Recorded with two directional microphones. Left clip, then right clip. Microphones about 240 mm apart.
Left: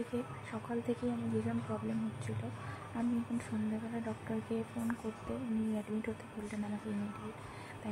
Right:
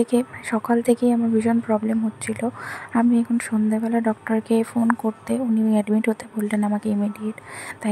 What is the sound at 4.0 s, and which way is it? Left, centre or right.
Speech, right.